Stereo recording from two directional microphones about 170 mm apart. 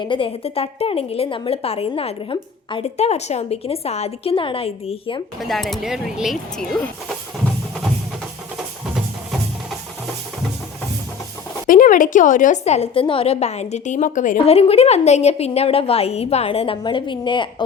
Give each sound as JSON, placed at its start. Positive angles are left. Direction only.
{"t": 0.0, "sound": "a woman's voice", "side_deg": 30}
{"t": 5.4, "sound": "speech", "side_deg": 0}
{"t": 11.7, "sound": "a woman's voice", "side_deg": 50}